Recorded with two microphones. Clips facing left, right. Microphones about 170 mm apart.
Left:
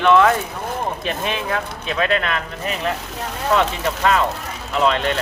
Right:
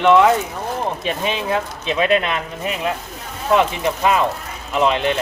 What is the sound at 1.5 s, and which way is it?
Speech, 20° right (ahead or behind).